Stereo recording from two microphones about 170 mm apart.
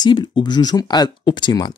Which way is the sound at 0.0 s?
25° left (ahead or behind).